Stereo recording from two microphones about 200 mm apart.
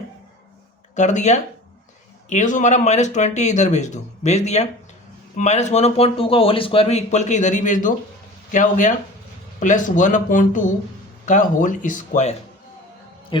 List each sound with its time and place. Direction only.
0.9 s speech: 35° left (ahead or behind)